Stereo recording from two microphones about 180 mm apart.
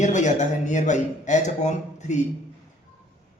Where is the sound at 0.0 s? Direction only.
40° left (ahead or behind).